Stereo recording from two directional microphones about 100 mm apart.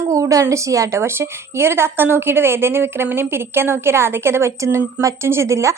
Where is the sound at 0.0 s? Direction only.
35° right (ahead or behind).